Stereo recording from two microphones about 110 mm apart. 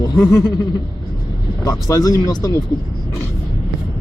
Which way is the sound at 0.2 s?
35° left (ahead or behind).